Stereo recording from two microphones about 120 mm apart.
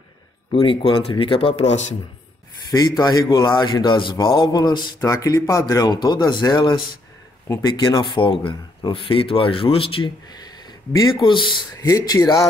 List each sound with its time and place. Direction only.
0.5 s speech: 45° left (ahead or behind); by 2.0 s 70° left (ahead or behind)
3.0 s speech: 35° left (ahead or behind)
10.2 s a sound: 35° left (ahead or behind)
11.1 s speech: 45° left (ahead or behind)
11.7 s speech: 30° left (ahead or behind)